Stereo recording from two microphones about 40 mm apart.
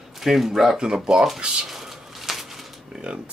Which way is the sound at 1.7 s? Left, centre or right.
Centre.